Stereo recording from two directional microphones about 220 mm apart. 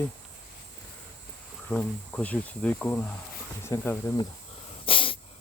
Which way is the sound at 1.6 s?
5° left (ahead or behind).